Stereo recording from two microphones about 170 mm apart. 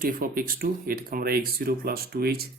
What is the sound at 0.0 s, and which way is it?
Speech, 55° right (ahead or behind).